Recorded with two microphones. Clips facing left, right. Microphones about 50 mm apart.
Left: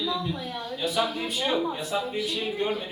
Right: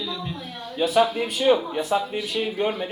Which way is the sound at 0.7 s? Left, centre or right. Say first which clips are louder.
Right 8 dB; right.